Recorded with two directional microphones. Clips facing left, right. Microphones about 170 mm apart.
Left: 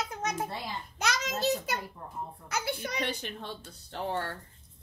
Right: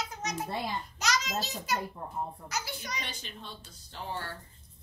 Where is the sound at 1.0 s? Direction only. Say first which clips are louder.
Left 2 dB; 55° left (ahead or behind).